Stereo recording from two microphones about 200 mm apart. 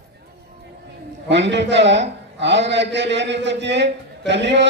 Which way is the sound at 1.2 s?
60° right (ahead or behind).